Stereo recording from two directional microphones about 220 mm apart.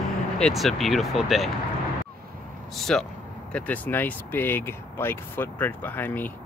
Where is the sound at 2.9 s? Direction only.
5° left (ahead or behind).